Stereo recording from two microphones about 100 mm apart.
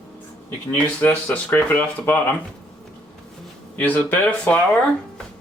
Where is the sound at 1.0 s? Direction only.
15° left (ahead or behind).